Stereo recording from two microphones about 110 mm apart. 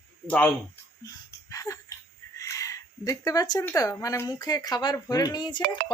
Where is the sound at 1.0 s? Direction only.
30° left (ahead or behind).